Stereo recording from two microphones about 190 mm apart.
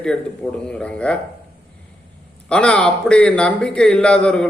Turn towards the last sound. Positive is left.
turn(degrees=5)  # may be behind; listen again after turning